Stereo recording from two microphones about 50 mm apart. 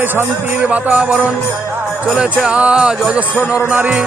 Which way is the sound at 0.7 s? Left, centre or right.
Right.